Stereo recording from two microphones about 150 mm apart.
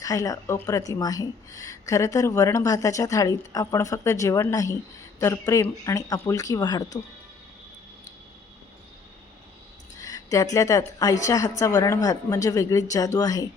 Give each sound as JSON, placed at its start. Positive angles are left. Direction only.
{"t": 0.0, "sound": "speech", "side_deg": 25}
{"t": 9.9, "sound": "a woman's voice", "side_deg": 25}